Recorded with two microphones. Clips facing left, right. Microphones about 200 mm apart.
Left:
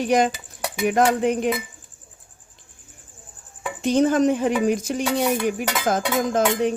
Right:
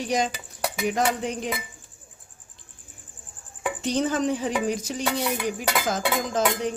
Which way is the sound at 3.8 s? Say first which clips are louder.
Left 7 dB; 50° left (ahead or behind).